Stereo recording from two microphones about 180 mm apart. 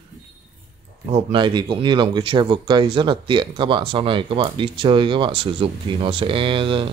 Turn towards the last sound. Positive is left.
turn(degrees=-30)  # may be behind; listen again after turning